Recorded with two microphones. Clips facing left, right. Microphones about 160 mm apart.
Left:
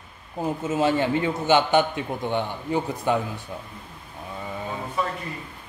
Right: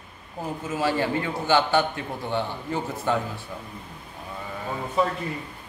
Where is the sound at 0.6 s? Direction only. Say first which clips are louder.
Left 3 dB; 25° left (ahead or behind).